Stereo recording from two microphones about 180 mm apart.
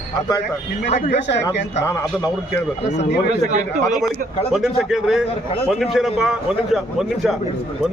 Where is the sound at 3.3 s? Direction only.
40° right (ahead or behind).